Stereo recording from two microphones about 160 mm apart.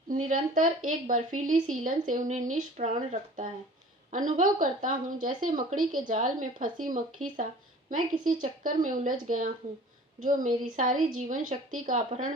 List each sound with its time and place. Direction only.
0.1 s a woman's voice: 50° right (ahead or behind)